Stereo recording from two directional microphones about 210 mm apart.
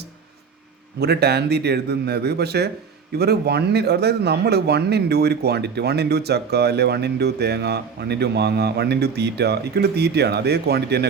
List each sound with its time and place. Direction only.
0.9 s speech: 50° right (ahead or behind)